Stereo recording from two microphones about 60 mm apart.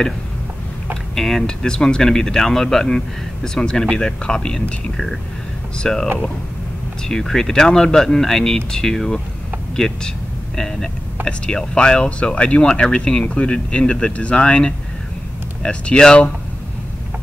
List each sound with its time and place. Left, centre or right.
1.1 s speech: centre
7.1 s speech: centre